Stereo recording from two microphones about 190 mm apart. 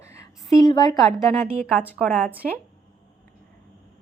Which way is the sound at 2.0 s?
5° left (ahead or behind).